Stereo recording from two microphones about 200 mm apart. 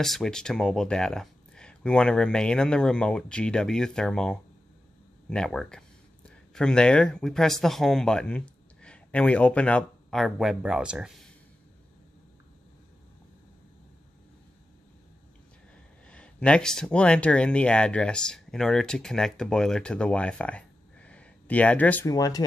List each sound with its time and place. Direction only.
0.0 s speech: centre (ahead or behind)
16.1 s speech: 5° left (ahead or behind)